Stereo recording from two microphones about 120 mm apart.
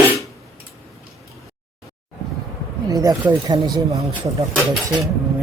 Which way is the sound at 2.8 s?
30° right (ahead or behind).